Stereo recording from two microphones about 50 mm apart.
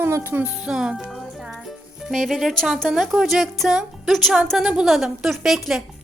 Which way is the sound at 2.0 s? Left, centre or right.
Centre.